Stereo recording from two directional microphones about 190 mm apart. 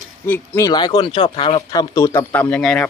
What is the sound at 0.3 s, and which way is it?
Speech, 10° left (ahead or behind).